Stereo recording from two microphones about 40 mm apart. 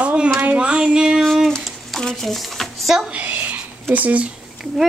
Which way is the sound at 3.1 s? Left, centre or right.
Right.